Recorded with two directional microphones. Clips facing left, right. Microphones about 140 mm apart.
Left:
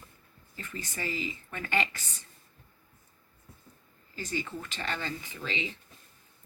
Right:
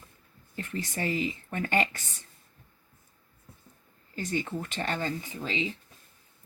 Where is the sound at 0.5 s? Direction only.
60° right (ahead or behind).